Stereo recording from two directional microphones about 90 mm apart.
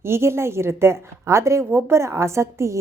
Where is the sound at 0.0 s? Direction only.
30° right (ahead or behind).